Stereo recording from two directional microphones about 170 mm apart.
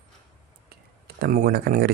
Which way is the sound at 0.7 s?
70° right (ahead or behind).